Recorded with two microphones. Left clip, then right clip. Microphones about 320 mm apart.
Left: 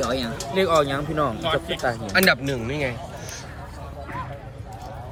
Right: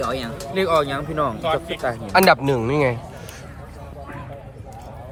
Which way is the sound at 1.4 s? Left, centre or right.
Centre.